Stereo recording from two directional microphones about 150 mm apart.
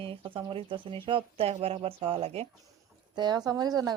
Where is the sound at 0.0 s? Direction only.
35° right (ahead or behind).